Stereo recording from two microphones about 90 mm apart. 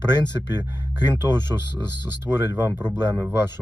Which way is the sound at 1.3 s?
10° left (ahead or behind).